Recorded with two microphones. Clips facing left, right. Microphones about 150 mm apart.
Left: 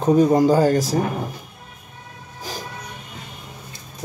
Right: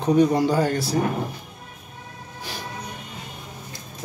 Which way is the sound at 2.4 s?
40° left (ahead or behind).